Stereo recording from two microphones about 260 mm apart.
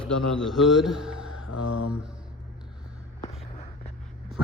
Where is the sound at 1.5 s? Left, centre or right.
Left.